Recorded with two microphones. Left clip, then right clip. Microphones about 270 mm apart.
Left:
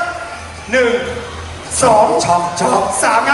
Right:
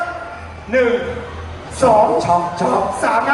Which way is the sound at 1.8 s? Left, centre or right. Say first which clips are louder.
Left 2 dB; right.